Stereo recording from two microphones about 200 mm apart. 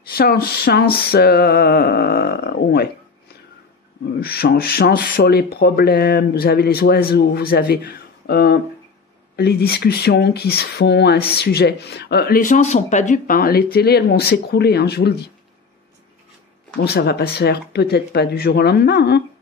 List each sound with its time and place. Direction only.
0.1 s speech: 50° left (ahead or behind)
4.2 s speech: 50° left (ahead or behind)
16.8 s speech: 55° left (ahead or behind)